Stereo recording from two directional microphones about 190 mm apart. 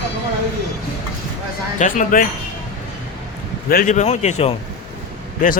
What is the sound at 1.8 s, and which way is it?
Speech, 40° left (ahead or behind).